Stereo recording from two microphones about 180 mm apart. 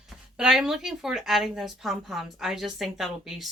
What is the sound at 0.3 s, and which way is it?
A woman's voice, 5° right (ahead or behind).